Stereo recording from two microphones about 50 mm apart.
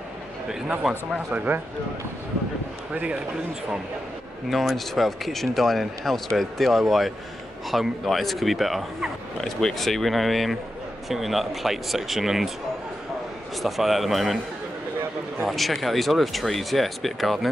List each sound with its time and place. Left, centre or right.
0.5 s a man's voice: centre
1.3 s speech: right
2.9 s a man's voice: right
4.5 s speech: centre
9.4 s speech: centre
13.6 s speech: centre
15.4 s speech: centre